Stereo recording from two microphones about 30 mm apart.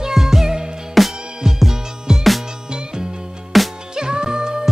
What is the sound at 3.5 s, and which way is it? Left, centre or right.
Music, centre.